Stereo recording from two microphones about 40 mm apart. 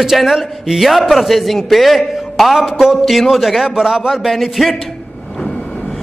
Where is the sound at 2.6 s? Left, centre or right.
Centre.